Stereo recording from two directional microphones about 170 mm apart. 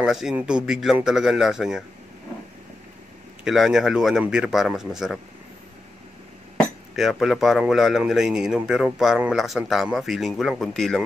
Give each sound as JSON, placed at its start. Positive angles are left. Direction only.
{"t": 0.0, "sound": "a man's voice", "side_deg": 0}
{"t": 3.4, "sound": "a man's voice", "side_deg": 0}
{"t": 7.0, "sound": "a man's voice", "side_deg": 0}